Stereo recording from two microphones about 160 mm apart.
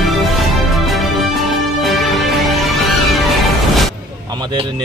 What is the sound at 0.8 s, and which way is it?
Music, centre (ahead or behind).